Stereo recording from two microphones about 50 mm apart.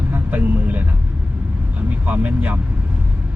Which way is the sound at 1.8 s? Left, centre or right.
Right.